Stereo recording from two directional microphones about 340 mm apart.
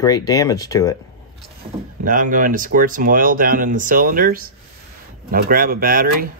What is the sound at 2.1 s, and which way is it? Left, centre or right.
Speech, right.